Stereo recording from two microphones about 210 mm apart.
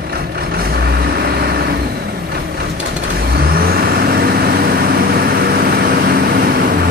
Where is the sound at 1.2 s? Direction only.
50° right (ahead or behind).